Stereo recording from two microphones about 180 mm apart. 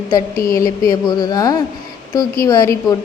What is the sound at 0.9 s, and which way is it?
A woman's voice, 20° left (ahead or behind).